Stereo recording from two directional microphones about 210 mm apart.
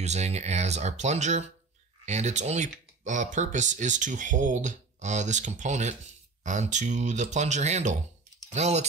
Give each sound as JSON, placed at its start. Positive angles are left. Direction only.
{"t": 0.0, "sound": "speech", "side_deg": -30}